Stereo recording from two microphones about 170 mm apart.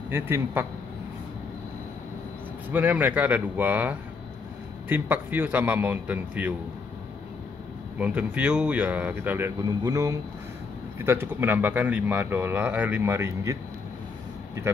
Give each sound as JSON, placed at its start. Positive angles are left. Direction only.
{"t": 0.1, "sound": "speech", "side_deg": -10}
{"t": 2.7, "sound": "speech", "side_deg": -10}
{"t": 8.0, "sound": "speech", "side_deg": -10}